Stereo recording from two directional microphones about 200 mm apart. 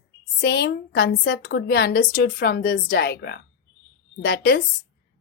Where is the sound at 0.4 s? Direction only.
55° left (ahead or behind).